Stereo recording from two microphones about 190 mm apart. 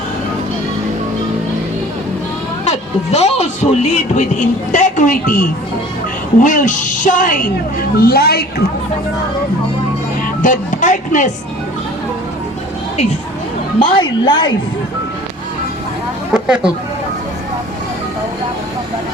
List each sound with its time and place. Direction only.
2.6 s a woman's voice: 35° left (ahead or behind); by 8.6 s 55° left (ahead or behind)
10.4 s speech: 40° left (ahead or behind)
13.7 s a woman's voice: 25° left (ahead or behind)
16.3 s speech: 5° right (ahead or behind)